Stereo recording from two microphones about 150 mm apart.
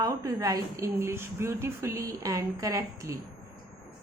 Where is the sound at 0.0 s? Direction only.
20° right (ahead or behind).